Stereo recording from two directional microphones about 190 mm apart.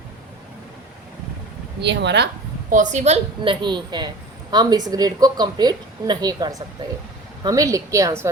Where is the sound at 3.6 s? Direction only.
25° right (ahead or behind).